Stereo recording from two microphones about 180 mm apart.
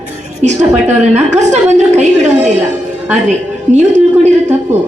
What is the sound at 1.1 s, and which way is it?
Speech, 40° right (ahead or behind).